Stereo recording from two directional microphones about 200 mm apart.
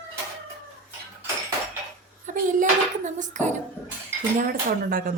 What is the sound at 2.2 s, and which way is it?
A child's voice, 40° right (ahead or behind).